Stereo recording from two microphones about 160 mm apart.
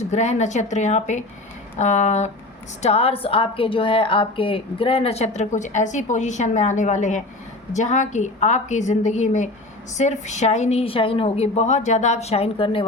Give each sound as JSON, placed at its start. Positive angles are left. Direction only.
{"t": 0.0, "sound": "a woman's voice", "side_deg": 45}